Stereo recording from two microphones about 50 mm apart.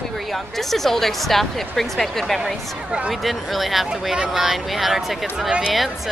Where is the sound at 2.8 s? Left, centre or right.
Right.